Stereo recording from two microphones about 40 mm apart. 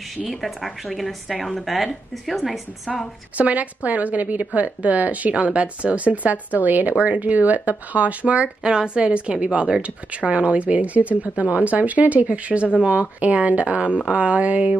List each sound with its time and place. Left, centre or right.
0.3 s a woman's voice: centre
3.3 s speech: right
5.3 s speech: right
8.6 s speech: centre; by 14.8 s right